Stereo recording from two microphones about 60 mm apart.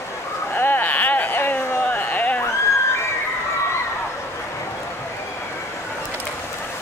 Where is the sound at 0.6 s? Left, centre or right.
Left.